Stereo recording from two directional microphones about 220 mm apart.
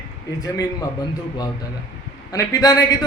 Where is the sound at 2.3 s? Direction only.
15° left (ahead or behind).